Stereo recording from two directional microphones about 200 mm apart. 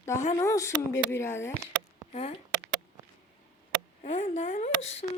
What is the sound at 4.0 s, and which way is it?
Speech, 35° left (ahead or behind).